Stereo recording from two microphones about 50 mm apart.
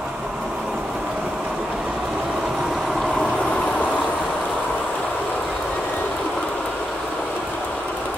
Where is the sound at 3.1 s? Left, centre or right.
Left.